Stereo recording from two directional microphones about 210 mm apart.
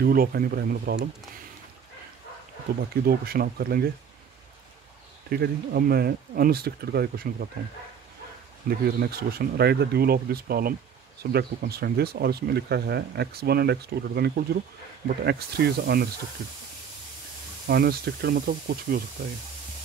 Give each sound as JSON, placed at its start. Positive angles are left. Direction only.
{"t": 0.0, "sound": "speech", "side_deg": -45}
{"t": 2.9, "sound": "speech", "side_deg": -45}
{"t": 5.3, "sound": "speech", "side_deg": -50}
{"t": 8.6, "sound": "speech", "side_deg": -45}
{"t": 17.6, "sound": "speech", "side_deg": -50}